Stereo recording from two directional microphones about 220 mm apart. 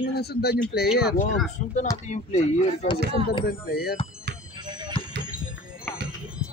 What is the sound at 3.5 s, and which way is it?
Speech, 45° left (ahead or behind).